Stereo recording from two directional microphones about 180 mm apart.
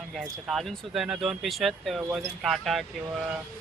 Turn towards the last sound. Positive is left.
turn(degrees=0)  # may be behind; listen again after turning